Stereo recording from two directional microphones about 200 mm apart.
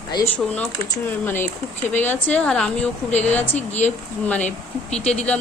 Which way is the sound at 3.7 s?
35° left (ahead or behind).